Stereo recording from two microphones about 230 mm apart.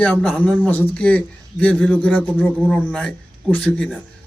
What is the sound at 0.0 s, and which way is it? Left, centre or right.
A man's voice, centre.